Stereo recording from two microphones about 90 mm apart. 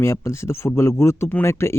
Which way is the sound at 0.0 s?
30° left (ahead or behind).